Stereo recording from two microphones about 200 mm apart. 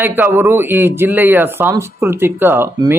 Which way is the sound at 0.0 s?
10° right (ahead or behind).